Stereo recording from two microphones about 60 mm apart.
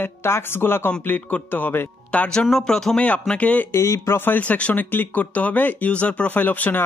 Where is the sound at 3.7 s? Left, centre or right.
Left.